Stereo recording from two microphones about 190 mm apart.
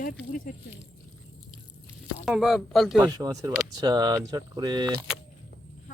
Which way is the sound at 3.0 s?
20° right (ahead or behind).